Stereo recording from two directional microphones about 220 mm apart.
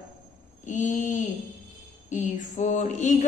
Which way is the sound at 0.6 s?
35° left (ahead or behind).